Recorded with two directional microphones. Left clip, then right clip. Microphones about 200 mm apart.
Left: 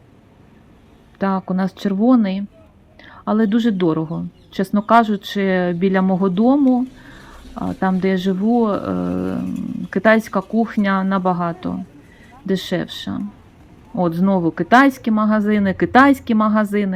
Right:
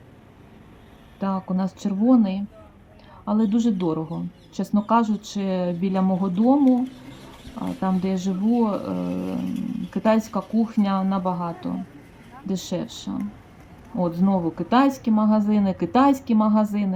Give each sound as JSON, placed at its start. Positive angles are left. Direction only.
{"t": 1.2, "sound": "speech", "side_deg": 15}
{"t": 7.6, "sound": "speech", "side_deg": 20}